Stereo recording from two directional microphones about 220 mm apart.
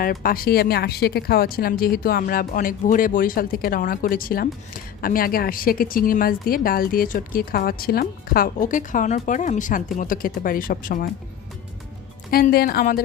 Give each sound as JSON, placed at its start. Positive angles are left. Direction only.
{"t": 0.0, "sound": "speech", "side_deg": 40}
{"t": 12.3, "sound": "a woman's voice", "side_deg": 45}